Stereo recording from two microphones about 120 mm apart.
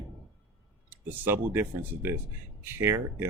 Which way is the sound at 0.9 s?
20° right (ahead or behind).